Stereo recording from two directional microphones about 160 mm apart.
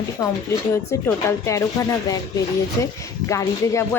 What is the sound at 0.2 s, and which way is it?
Speech, 20° left (ahead or behind).